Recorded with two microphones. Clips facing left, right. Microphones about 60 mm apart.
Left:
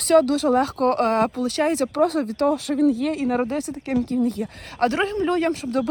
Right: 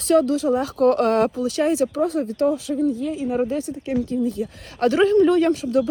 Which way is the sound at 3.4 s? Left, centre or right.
Left.